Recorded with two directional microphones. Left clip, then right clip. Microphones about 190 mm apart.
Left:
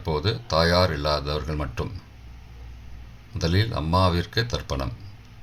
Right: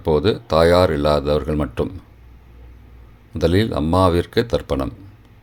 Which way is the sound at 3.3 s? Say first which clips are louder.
Right 9 dB; 50° right (ahead or behind).